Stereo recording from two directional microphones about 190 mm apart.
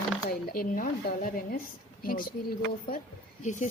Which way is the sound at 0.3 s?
50° left (ahead or behind).